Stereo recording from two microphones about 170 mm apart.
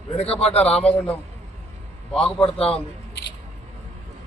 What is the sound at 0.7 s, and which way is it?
Speech, 5° left (ahead or behind).